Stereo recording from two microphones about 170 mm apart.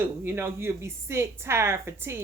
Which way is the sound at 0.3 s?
15° right (ahead or behind).